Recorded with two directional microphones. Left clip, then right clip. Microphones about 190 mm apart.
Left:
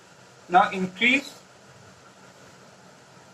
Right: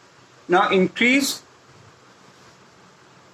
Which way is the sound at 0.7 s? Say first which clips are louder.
Right 5 dB; 15° right (ahead or behind).